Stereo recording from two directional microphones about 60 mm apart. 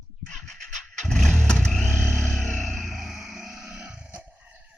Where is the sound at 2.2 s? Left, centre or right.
Centre.